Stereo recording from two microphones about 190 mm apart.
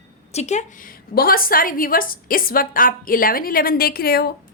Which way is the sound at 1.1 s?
50° left (ahead or behind).